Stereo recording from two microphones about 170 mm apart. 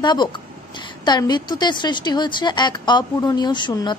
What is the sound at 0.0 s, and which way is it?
A woman's voice, 25° left (ahead or behind).